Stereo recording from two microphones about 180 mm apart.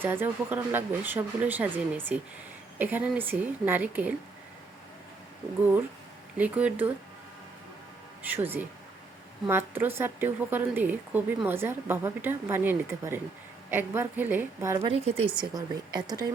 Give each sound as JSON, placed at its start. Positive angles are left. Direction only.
{"t": 0.0, "sound": "speech", "side_deg": -10}
{"t": 6.3, "sound": "speech", "side_deg": -5}
{"t": 8.2, "sound": "speech", "side_deg": -10}
{"t": 14.8, "sound": "speech", "side_deg": -35}
{"t": 15.4, "sound": "speech", "side_deg": -20}